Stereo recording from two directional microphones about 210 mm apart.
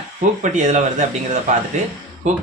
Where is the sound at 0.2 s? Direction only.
35° right (ahead or behind).